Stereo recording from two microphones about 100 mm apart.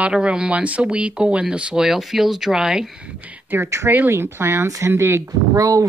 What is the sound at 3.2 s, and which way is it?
Speech, 20° right (ahead or behind).